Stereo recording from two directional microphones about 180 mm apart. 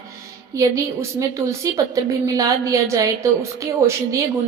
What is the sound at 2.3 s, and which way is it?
A woman's voice, 20° right (ahead or behind).